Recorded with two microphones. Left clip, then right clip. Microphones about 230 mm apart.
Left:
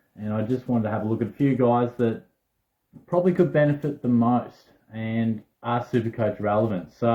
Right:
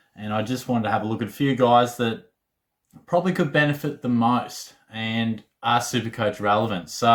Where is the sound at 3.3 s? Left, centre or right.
Centre.